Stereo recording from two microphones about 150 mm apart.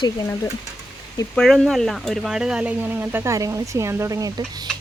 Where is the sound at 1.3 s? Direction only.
Centre (ahead or behind).